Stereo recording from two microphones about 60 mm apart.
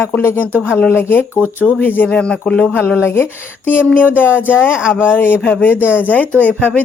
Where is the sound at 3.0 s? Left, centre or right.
Left.